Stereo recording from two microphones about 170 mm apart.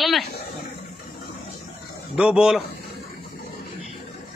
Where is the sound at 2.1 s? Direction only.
5° right (ahead or behind).